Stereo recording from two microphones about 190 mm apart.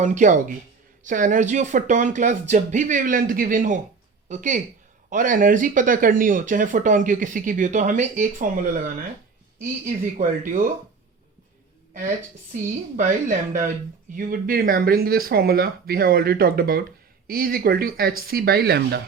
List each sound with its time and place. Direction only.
0.0 s a woman's voice: 40° right (ahead or behind)
13.0 s speech: 40° right (ahead or behind); by 19.0 s 60° right (ahead or behind)